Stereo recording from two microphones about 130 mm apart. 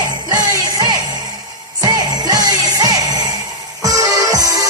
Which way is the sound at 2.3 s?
30° right (ahead or behind).